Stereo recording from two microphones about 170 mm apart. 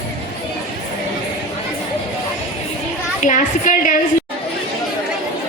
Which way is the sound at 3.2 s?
50° left (ahead or behind).